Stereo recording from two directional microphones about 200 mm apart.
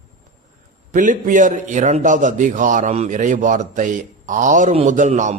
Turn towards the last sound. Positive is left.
turn(degrees=-35)  # may be behind; listen again after turning